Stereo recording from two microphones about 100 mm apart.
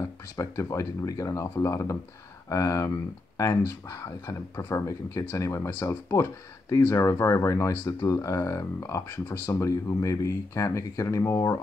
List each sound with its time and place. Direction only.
0.0 s speech: 30° left (ahead or behind)